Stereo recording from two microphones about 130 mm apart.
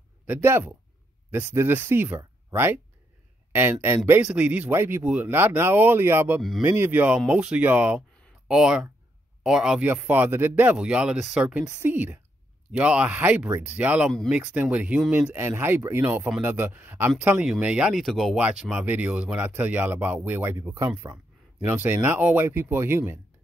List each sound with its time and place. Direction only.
0.3 s speech: 15° right (ahead or behind)
9.8 s speech: 15° right (ahead or behind)
21.5 s speech: 10° right (ahead or behind)